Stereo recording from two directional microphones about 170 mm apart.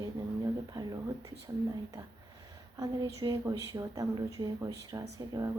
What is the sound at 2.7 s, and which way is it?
Speech, 20° right (ahead or behind).